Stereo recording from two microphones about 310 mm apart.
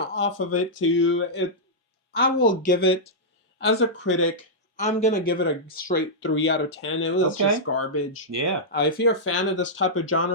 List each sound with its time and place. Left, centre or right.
0.0 s speech: left
3.6 s speech: left
4.8 s speech: left
8.7 s speech: left